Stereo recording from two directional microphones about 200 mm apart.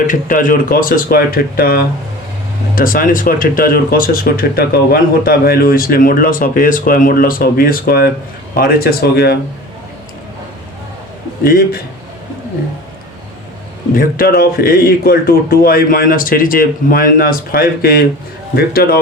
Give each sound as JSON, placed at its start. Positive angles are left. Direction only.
{"t": 0.1, "sound": "speech", "side_deg": 40}
{"t": 11.4, "sound": "speech", "side_deg": 50}
{"t": 13.9, "sound": "speech", "side_deg": 45}